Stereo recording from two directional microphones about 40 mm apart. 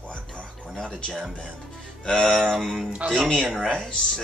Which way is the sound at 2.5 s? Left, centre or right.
Centre.